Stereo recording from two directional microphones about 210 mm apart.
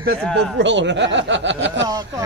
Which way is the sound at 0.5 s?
60° right (ahead or behind).